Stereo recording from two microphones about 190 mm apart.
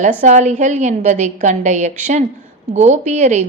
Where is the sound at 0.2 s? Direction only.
40° right (ahead or behind).